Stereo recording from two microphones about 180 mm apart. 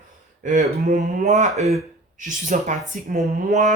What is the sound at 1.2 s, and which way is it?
Speech, 40° right (ahead or behind).